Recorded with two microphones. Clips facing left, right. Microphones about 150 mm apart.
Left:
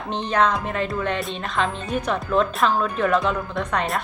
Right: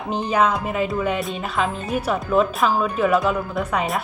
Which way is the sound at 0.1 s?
5° right (ahead or behind).